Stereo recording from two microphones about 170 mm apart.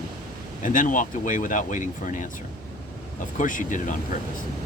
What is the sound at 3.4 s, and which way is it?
Speech, 50° left (ahead or behind).